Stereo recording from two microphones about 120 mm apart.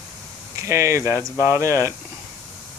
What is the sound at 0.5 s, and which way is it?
Speech, 25° right (ahead or behind).